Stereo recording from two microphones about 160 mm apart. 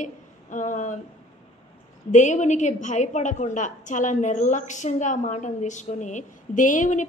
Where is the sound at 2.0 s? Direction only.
50° left (ahead or behind).